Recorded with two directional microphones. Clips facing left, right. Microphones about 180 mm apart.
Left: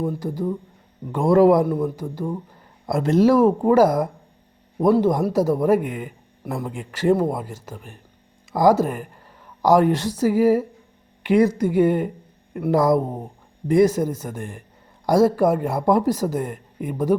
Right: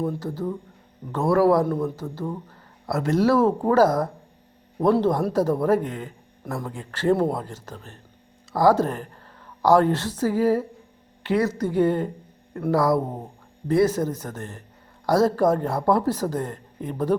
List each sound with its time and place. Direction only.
0.0 s speech: 10° left (ahead or behind)